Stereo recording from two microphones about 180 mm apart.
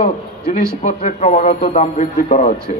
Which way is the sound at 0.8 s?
40° left (ahead or behind).